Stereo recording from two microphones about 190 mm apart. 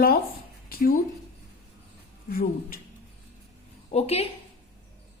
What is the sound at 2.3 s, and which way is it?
Speech, 50° left (ahead or behind).